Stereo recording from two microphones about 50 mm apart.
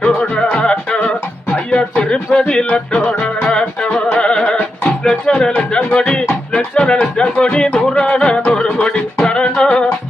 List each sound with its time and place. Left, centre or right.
0.2 s music: centre